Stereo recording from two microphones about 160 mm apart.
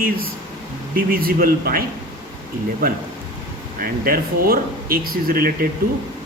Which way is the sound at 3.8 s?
65° right (ahead or behind).